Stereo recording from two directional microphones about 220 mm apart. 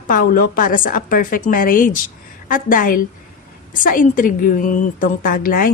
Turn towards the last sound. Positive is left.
turn(degrees=40)  # may be behind; listen again after turning